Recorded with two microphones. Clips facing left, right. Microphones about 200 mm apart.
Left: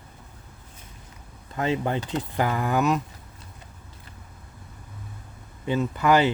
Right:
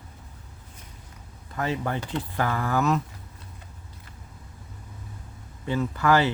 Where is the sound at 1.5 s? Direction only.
20° left (ahead or behind).